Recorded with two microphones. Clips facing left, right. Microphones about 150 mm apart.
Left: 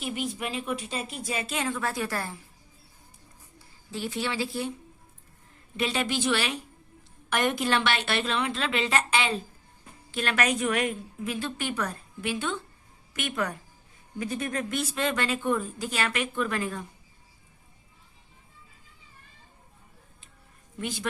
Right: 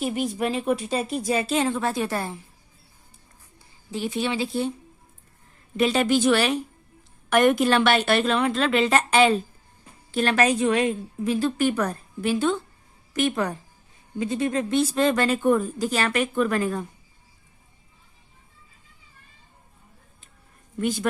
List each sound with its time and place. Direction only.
0.0 s a woman's voice: 40° right (ahead or behind); by 2.4 s 20° right (ahead or behind)
3.9 s speech: 20° right (ahead or behind)
5.7 s a woman's voice: 45° right (ahead or behind)
20.7 s a woman's voice: 45° right (ahead or behind)